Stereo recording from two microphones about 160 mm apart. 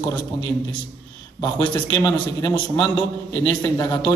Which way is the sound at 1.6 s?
25° left (ahead or behind).